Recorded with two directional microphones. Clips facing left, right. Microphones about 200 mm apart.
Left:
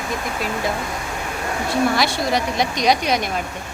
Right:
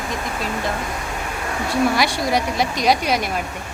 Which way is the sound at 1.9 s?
10° right (ahead or behind).